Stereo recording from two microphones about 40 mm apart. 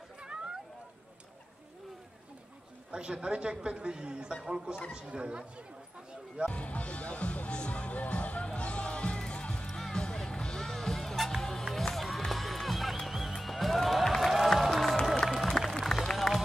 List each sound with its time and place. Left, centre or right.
0.2 s a sound: right
2.9 s a man's voice: right
6.5 s music: left
9.7 s music: centre
15.9 s run: centre